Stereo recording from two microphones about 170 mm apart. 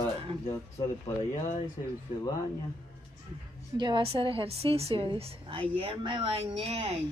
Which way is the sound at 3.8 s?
30° right (ahead or behind).